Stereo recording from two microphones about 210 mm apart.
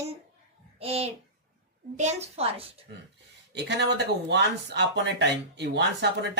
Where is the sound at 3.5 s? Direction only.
55° right (ahead or behind).